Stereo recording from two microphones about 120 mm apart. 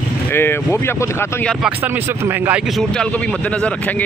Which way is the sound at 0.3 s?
20° left (ahead or behind).